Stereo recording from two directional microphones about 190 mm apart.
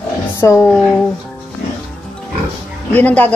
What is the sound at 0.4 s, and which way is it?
Speech, 15° left (ahead or behind).